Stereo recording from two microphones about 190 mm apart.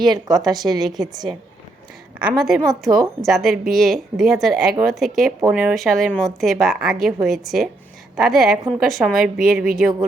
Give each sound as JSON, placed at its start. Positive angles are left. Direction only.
{"t": 0.0, "sound": "a woman's voice", "side_deg": -20}
{"t": 2.4, "sound": "a woman's voice", "side_deg": 0}